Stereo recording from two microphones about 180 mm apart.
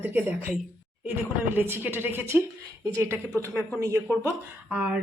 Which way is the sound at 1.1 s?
10° right (ahead or behind).